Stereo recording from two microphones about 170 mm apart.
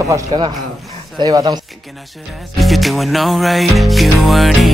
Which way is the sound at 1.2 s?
25° right (ahead or behind).